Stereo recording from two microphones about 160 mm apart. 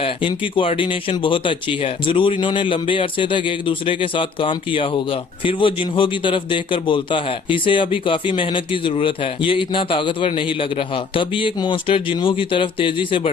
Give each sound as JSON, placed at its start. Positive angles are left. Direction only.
{"t": 0.3, "sound": "a man's voice", "side_deg": 35}